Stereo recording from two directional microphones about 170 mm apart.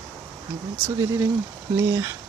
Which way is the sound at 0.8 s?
20° right (ahead or behind).